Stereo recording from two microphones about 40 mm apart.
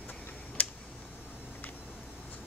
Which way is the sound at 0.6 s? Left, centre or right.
Left.